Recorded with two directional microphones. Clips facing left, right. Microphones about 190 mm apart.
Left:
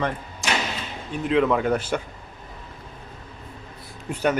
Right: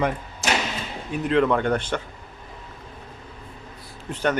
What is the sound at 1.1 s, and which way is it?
Speech, centre (ahead or behind).